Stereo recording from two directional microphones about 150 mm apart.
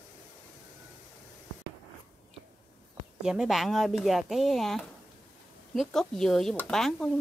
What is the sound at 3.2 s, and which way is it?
Speech, 5° right (ahead or behind).